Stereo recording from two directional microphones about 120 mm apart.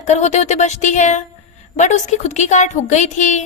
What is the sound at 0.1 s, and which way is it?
A woman's voice, 70° left (ahead or behind).